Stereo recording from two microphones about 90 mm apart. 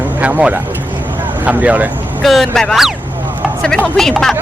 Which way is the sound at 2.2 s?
Centre (ahead or behind).